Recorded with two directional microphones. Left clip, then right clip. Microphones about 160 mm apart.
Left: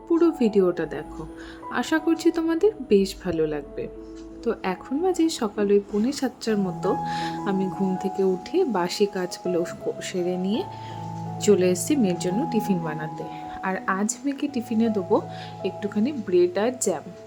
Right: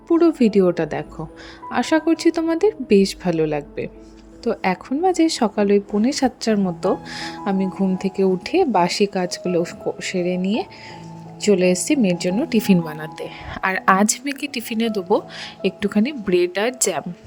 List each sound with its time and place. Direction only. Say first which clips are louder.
0.1 s a woman's voice: right 4 dB; 35° right (ahead or behind)
12.5 s a woman's voice: right 5 dB; 50° right (ahead or behind)